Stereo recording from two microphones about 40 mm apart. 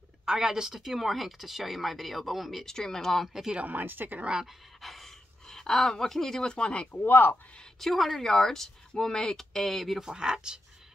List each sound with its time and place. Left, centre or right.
0.2 s speech: centre
2.6 s speech: centre
3.6 s speech: right
4.8 s dog: centre
5.5 s speech: centre
6.4 s speech: left
7.1 s speech: left
7.8 s speech: centre
10.0 s speech: centre